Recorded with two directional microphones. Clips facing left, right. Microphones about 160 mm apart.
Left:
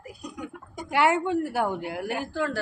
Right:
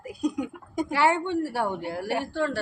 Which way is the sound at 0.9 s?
30° right (ahead or behind).